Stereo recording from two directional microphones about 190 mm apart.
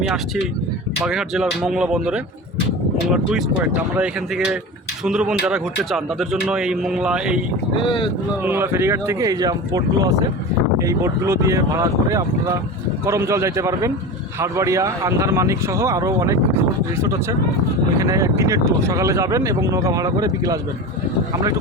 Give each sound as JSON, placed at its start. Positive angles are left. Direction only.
{"t": 1.0, "sound": "a man's voice", "side_deg": 0}
{"t": 7.8, "sound": "speech", "side_deg": 25}
{"t": 8.4, "sound": "speech", "side_deg": -10}
{"t": 18.0, "sound": "speech", "side_deg": -15}